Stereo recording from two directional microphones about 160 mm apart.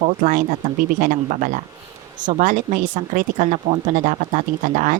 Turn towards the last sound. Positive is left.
turn(degrees=-55)  # may be behind; listen again after turning